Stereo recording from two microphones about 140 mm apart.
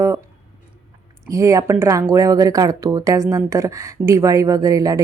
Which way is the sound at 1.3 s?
20° right (ahead or behind).